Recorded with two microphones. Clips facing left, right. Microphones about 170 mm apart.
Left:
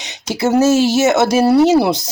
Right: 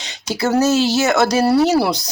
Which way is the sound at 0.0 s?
20° left (ahead or behind).